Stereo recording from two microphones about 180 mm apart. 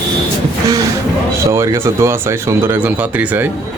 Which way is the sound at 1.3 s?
15° right (ahead or behind).